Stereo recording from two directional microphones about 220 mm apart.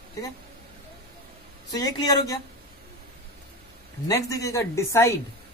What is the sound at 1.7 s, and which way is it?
Speech, 15° left (ahead or behind).